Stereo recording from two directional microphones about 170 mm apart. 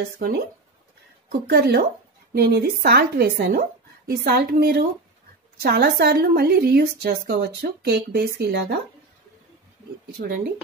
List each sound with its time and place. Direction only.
1.5 s a woman's voice: 70° right (ahead or behind)
10.1 s a woman's voice: 60° right (ahead or behind)